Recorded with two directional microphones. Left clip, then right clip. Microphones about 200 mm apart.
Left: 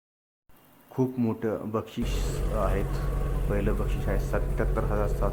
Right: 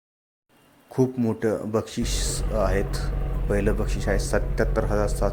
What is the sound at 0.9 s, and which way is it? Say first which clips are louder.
Speech: right 5 dB; 10° right (ahead or behind).